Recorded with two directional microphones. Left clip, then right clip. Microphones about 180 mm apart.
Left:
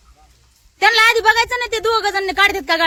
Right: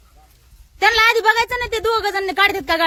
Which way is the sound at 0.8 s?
10° right (ahead or behind).